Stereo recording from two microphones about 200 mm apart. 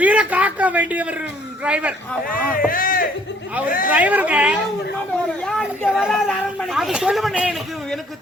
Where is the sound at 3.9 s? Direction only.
10° right (ahead or behind).